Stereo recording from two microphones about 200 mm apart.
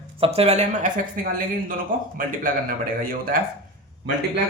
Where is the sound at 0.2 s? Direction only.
30° right (ahead or behind).